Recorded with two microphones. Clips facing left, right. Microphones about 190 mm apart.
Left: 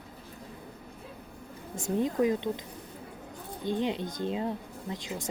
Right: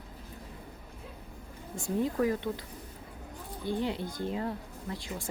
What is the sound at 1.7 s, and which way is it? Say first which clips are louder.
Speech: left 2 dB; 20° left (ahead or behind).